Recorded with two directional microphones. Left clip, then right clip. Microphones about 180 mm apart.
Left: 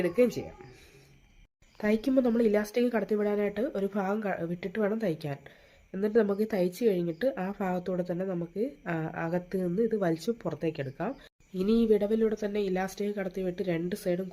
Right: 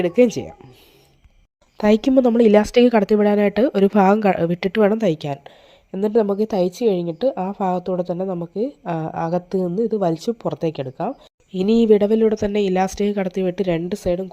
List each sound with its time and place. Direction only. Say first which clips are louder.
0.0 s speech: right 10 dB; 45° right (ahead or behind)
1.8 s speech: right 11 dB; 40° right (ahead or behind)